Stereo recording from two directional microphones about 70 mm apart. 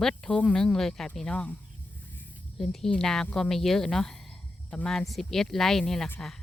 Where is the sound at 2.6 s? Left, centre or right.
Centre.